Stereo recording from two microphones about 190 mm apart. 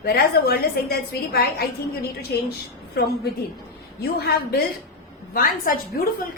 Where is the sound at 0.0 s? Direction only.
55° left (ahead or behind).